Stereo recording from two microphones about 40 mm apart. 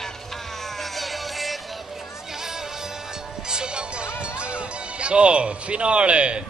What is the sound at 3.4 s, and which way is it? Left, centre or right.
Music, right.